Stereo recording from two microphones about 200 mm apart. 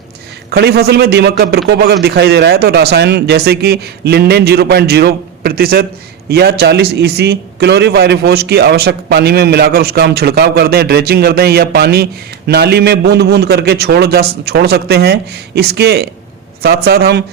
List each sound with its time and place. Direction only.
0.5 s a man's voice: 55° right (ahead or behind)